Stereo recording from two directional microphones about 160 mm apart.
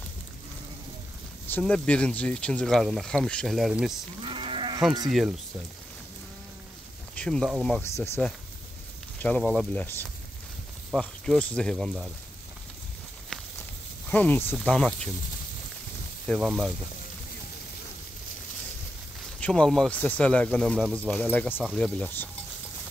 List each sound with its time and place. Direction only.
1.5 s speech: 10° left (ahead or behind)
4.2 s livestock: 35° right (ahead or behind)
7.2 s speech: 5° left (ahead or behind)
7.9 s speech: 15° left (ahead or behind)
9.2 s speech: 5° left (ahead or behind)
13.3 s a sound: 5° left (ahead or behind)
14.0 s speech: 10° left (ahead or behind)
16.3 s speech: 5° right (ahead or behind)
19.4 s speech: 5° left (ahead or behind)